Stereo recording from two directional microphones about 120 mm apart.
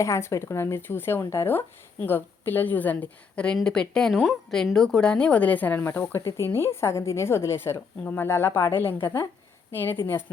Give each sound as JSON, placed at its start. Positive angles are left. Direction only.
{"t": 0.0, "sound": "speech", "side_deg": 25}